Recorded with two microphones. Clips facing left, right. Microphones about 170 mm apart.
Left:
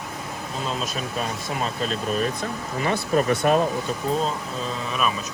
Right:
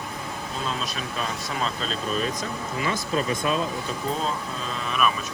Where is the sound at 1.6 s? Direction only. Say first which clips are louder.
Left 2 dB; 50° left (ahead or behind); by 3.6 s 65° left (ahead or behind).